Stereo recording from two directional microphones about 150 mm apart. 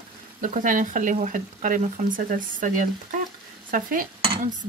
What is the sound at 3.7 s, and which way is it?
Dishes, 65° right (ahead or behind).